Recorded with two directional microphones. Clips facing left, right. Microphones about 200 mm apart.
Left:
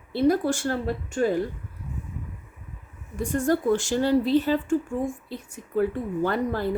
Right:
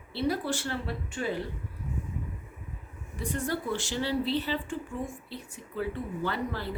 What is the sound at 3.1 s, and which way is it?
A woman's voice, 45° left (ahead or behind).